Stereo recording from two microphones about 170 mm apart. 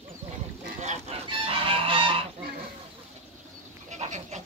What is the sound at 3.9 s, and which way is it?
Goat, 45° right (ahead or behind).